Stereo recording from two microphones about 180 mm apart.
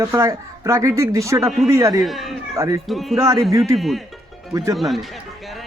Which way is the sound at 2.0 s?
Centre (ahead or behind).